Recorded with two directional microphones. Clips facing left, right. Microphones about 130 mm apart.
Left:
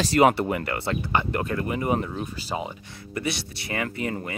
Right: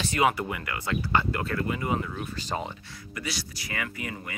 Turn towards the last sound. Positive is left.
turn(degrees=35)  # may be behind; listen again after turning